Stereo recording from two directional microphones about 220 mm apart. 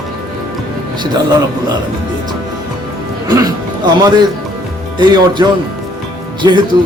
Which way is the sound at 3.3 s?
20° right (ahead or behind).